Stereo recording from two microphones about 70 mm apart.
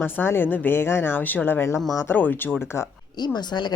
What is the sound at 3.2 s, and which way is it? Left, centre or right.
Speech, left.